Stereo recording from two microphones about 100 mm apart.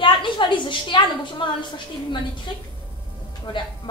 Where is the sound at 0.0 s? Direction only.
55° left (ahead or behind).